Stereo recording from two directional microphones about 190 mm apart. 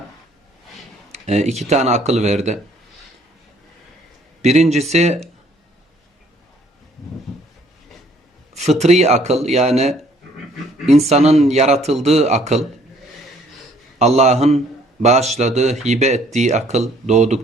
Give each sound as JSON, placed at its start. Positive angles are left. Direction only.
{"t": 1.1, "sound": "speech", "side_deg": -35}
{"t": 4.4, "sound": "speech", "side_deg": -35}
{"t": 8.8, "sound": "speech", "side_deg": -35}
{"t": 11.1, "sound": "speech", "side_deg": -35}
{"t": 14.0, "sound": "speech", "side_deg": -35}